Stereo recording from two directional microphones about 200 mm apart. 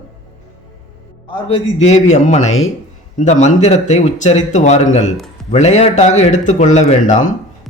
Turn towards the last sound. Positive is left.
turn(degrees=40)  # may be behind; listen again after turning